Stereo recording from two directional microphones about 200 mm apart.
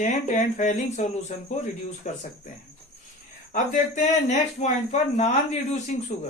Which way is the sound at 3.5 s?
40° left (ahead or behind).